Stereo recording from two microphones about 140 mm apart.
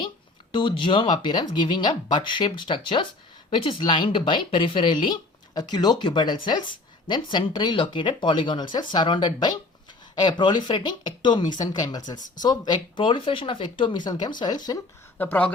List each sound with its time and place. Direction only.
0.5 s speech: 35° left (ahead or behind)
15.2 s speech: 10° left (ahead or behind)